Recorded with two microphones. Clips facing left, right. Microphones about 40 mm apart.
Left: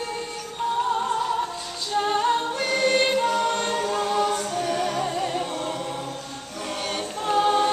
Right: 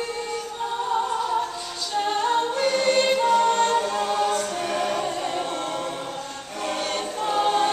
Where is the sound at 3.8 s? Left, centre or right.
Centre.